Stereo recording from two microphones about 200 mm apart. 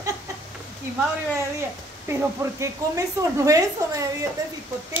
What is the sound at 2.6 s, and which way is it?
A woman's voice, 15° right (ahead or behind).